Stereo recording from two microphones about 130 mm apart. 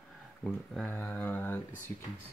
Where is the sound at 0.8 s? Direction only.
15° left (ahead or behind).